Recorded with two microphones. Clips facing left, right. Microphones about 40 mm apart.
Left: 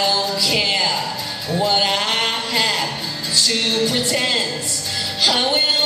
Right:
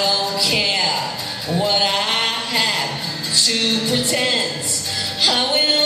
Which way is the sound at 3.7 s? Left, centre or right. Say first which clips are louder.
Left 1 dB; centre.